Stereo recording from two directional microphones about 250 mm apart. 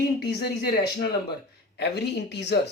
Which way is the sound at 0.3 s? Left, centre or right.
Left.